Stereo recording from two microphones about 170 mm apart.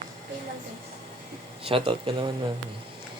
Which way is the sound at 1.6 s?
30° right (ahead or behind).